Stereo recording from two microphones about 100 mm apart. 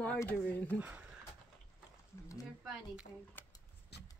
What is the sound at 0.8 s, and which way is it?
Speech, 15° right (ahead or behind).